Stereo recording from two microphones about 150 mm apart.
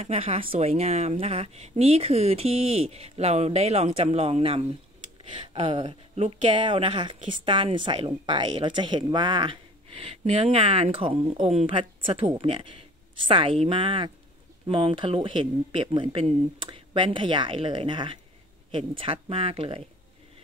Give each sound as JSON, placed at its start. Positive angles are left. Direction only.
{"t": 0.0, "sound": "speech", "side_deg": -40}
{"t": 5.5, "sound": "a sound", "side_deg": -35}
{"t": 6.1, "sound": "speech", "side_deg": -50}
{"t": 6.6, "sound": "speech", "side_deg": -35}